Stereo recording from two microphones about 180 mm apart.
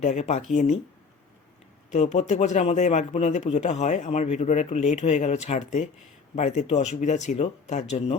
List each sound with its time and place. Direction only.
0.0 s speech: 40° left (ahead or behind)
1.9 s speech: 40° left (ahead or behind)